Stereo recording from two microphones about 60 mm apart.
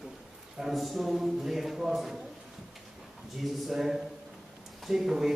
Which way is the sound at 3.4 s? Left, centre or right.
Centre.